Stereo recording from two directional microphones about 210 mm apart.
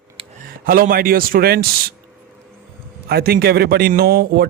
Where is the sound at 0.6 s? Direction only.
45° right (ahead or behind).